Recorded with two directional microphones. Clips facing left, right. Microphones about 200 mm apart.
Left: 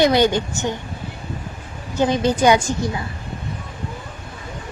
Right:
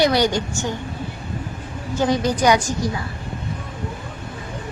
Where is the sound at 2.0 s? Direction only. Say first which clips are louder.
Left 2 dB; 20° left (ahead or behind).